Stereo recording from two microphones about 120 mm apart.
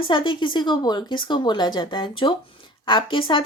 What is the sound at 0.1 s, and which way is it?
A woman's voice, 40° left (ahead or behind).